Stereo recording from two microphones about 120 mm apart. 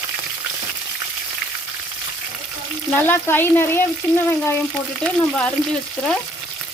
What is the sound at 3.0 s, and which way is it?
Speech, 15° left (ahead or behind).